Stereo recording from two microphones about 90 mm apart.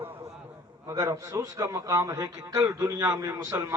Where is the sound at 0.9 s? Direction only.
45° right (ahead or behind).